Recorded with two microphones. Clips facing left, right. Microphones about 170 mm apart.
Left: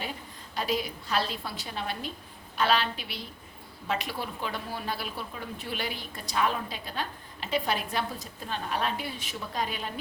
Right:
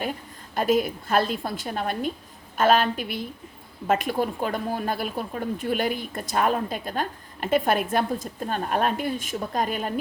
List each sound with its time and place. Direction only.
0.0 s speech: 50° right (ahead or behind)